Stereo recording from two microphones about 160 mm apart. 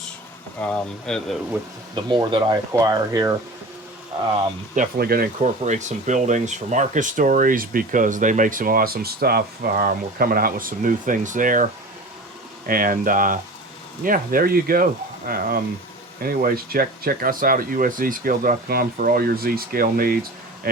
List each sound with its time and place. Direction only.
0.6 s speech: 5° left (ahead or behind)
2.0 s speech: 30° right (ahead or behind)
4.7 s speech: 65° right (ahead or behind)
5.4 s speech: 50° right (ahead or behind); by 20.1 s 65° right (ahead or behind)